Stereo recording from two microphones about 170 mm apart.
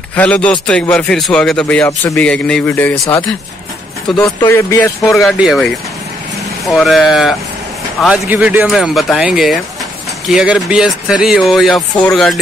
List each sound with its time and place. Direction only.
0.1 s a man's voice: 5° left (ahead or behind)
1.9 s a man's voice: 15° left (ahead or behind)
2.2 s a man's voice: 5° left (ahead or behind)
4.4 s a man's voice: 15° left (ahead or behind)
5.2 s a man's voice: centre (ahead or behind)